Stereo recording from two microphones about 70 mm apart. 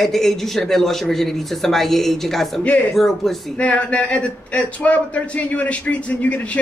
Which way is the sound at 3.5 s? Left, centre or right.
Centre.